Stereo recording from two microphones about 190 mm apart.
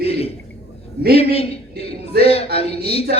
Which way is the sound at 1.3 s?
30° left (ahead or behind).